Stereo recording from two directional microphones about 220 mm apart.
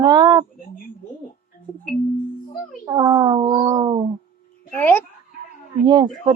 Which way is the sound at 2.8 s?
20° right (ahead or behind).